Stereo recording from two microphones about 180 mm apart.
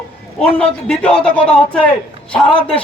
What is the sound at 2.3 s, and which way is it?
Speech, 5° left (ahead or behind).